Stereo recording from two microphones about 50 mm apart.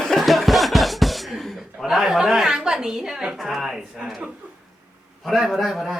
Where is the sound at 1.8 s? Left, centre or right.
Centre.